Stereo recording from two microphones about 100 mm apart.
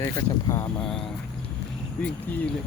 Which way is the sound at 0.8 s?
5° left (ahead or behind).